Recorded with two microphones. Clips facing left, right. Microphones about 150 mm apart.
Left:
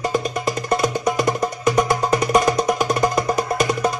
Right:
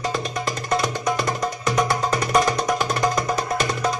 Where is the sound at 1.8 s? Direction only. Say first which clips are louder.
Left 4 dB; 15° left (ahead or behind).